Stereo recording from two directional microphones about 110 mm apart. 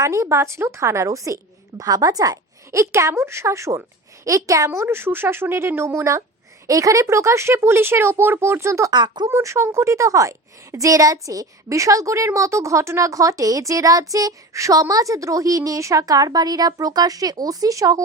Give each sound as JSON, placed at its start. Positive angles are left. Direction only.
{"t": 0.0, "sound": "a woman's voice", "side_deg": -30}
{"t": 8.9, "sound": "a woman's voice", "side_deg": -40}
{"t": 9.3, "sound": "a woman's voice", "side_deg": -25}